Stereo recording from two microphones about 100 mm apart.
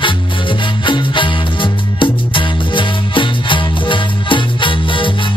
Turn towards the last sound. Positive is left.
turn(degrees=55)  # may be behind; listen again after turning